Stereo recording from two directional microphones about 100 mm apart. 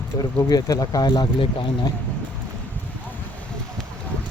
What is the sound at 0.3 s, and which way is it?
Speech, 40° left (ahead or behind).